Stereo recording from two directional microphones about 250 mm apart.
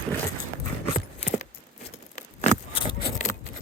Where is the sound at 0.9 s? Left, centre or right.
Left.